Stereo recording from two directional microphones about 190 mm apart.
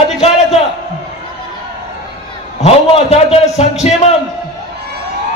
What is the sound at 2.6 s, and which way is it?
A man's voice, 35° left (ahead or behind).